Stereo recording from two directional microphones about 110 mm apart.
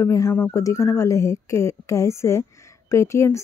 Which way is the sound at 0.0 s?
25° left (ahead or behind).